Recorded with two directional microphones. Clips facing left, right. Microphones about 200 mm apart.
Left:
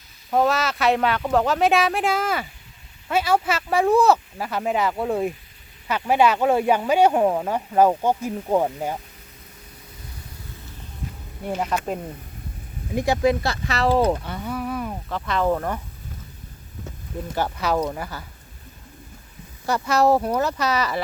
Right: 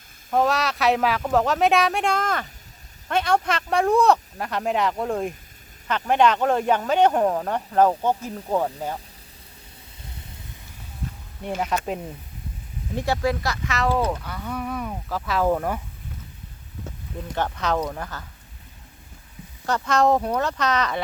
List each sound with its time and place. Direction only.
0.3 s speech: centre (ahead or behind)
11.4 s speech: centre (ahead or behind)
12.9 s speech: 15° left (ahead or behind)
13.4 s speech: 30° left (ahead or behind)
14.4 s speech: centre (ahead or behind)
17.3 s speech: 5° left (ahead or behind)
19.6 s speech: 10° left (ahead or behind)